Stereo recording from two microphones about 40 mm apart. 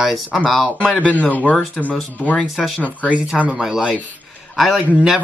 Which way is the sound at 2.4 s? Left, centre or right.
Centre.